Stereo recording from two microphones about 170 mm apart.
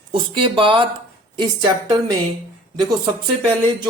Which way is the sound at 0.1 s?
30° right (ahead or behind).